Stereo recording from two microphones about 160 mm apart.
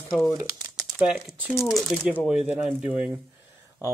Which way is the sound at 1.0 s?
5° right (ahead or behind).